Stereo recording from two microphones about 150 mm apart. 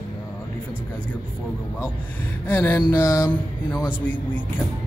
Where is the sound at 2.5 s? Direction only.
15° left (ahead or behind).